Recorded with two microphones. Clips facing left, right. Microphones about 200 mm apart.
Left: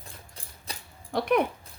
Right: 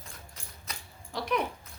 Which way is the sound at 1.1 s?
55° left (ahead or behind).